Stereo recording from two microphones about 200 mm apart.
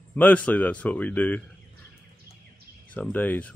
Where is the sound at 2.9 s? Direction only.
10° left (ahead or behind).